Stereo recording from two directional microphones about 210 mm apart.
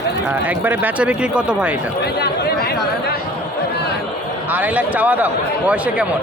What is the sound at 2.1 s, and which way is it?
Speech, 50° left (ahead or behind).